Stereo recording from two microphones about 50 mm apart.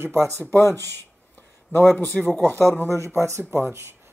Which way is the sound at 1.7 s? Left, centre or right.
Left.